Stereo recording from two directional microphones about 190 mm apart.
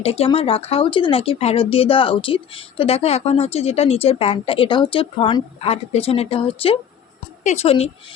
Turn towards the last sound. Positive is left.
turn(degrees=35)  # may be behind; listen again after turning